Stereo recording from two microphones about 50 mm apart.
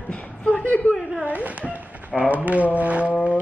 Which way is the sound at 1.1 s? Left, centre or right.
Right.